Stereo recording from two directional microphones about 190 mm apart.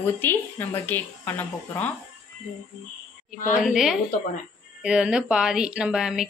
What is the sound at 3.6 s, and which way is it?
Speech, centre (ahead or behind).